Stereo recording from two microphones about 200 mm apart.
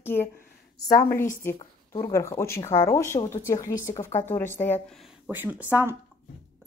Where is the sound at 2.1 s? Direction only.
15° left (ahead or behind).